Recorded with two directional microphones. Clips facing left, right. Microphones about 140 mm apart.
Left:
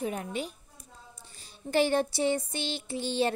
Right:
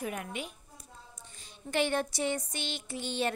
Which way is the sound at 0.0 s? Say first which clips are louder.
Left 4 dB; 30° left (ahead or behind).